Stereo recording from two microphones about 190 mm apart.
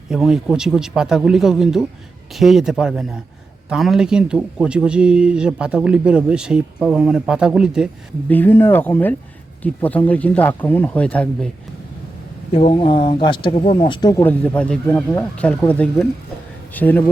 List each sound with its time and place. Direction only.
0.1 s a man's voice: centre (ahead or behind)
8.3 s speech: 10° left (ahead or behind)
12.5 s speech: 30° left (ahead or behind); by 17.1 s 10° left (ahead or behind)